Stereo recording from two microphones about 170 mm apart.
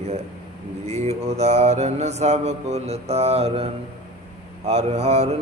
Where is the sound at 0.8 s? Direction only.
40° right (ahead or behind).